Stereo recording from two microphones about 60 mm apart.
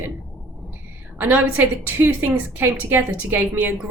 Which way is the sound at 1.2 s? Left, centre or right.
Right.